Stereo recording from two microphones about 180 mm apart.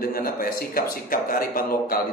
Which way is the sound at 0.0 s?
55° left (ahead or behind).